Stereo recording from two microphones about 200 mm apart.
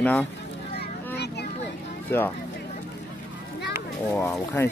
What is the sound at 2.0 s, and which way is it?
Speech, 10° left (ahead or behind).